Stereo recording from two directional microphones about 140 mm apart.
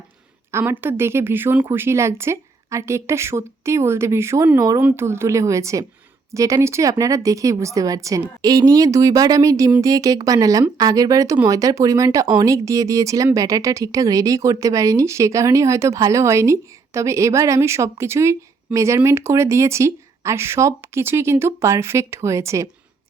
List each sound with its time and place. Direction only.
0.5 s speech: 15° right (ahead or behind)